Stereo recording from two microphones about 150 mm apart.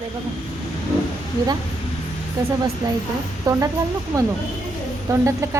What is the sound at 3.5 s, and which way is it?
Speech, 25° right (ahead or behind).